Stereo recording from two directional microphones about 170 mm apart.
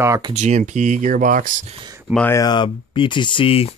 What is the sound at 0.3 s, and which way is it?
Speech, 40° right (ahead or behind).